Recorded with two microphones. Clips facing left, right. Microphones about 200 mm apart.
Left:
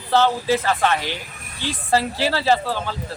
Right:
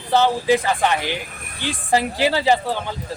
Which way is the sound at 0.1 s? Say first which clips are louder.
Right 1 dB; 15° right (ahead or behind).